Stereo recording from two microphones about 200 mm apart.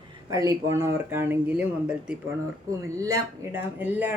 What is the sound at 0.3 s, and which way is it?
Speech, 15° right (ahead or behind).